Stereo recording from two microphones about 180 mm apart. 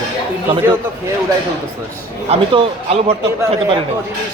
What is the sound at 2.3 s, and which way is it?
Speech, 30° right (ahead or behind).